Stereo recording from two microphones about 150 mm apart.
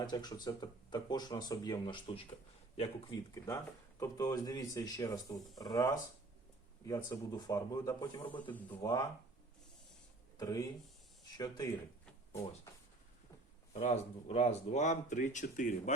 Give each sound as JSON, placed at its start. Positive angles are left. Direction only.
{"t": 0.0, "sound": "speech", "side_deg": 30}
{"t": 4.0, "sound": "speech", "side_deg": 25}
{"t": 10.3, "sound": "speech", "side_deg": 25}
{"t": 13.7, "sound": "speech", "side_deg": 45}